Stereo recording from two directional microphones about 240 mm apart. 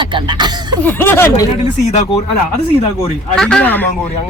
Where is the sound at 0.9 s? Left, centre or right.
Centre.